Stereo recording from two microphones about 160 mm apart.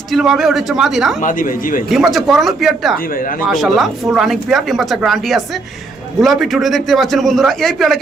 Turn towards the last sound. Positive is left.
turn(degrees=0)  # may be behind; listen again after turning